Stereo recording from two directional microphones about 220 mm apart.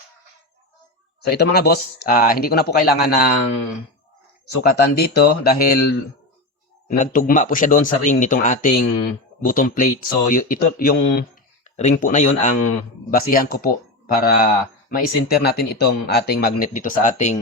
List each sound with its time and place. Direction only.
1.2 s speech: 45° left (ahead or behind)
4.4 s speech: 45° left (ahead or behind)
6.8 s speech: 40° left (ahead or behind)